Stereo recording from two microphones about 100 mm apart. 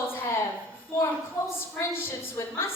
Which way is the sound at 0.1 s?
25° left (ahead or behind).